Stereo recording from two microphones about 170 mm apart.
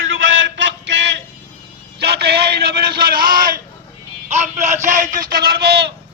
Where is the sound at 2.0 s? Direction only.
70° right (ahead or behind); by 3.6 s 55° right (ahead or behind).